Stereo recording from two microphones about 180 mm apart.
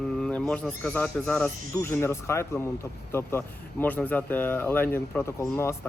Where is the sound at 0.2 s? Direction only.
5° left (ahead or behind).